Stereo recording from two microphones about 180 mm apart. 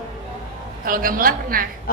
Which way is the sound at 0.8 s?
50° right (ahead or behind).